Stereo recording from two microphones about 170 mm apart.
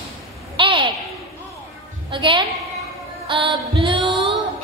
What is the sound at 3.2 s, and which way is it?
Music, 30° right (ahead or behind).